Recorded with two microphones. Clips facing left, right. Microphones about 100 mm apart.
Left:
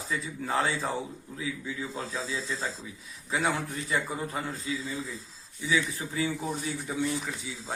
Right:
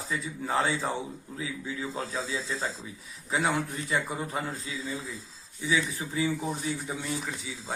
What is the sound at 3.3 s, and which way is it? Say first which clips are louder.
Speech: right 1 dB; 25° right (ahead or behind).